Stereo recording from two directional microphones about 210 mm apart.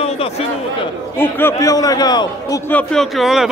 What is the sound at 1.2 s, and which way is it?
A man's voice, 10° left (ahead or behind).